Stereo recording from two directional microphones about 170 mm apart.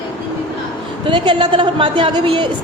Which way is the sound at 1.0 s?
30° right (ahead or behind).